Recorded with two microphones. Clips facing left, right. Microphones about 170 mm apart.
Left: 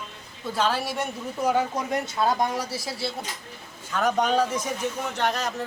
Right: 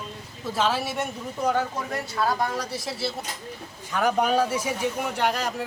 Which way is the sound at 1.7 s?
20° left (ahead or behind).